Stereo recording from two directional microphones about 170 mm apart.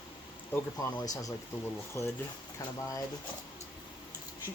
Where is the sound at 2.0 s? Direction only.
15° left (ahead or behind).